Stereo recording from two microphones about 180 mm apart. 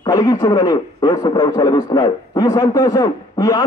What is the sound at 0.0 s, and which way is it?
A man's voice, 20° left (ahead or behind).